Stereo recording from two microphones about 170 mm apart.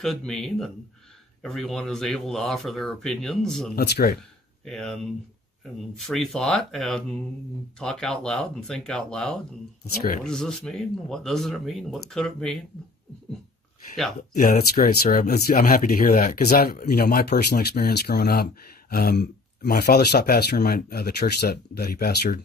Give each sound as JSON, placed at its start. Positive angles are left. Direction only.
{"t": 0.0, "sound": "speech", "side_deg": 0}
{"t": 3.7, "sound": "speech", "side_deg": 65}
{"t": 4.6, "sound": "speech", "side_deg": 5}
{"t": 14.3, "sound": "speech", "side_deg": 60}